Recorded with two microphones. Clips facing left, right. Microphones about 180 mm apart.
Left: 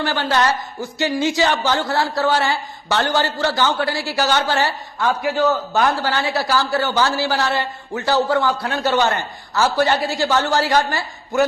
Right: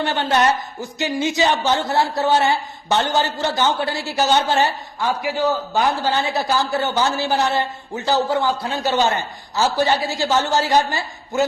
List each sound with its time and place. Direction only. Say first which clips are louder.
0.0 s speech: right 1 dB; 20° right (ahead or behind)